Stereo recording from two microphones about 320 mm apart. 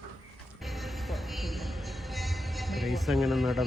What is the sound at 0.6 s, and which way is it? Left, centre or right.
Music, centre.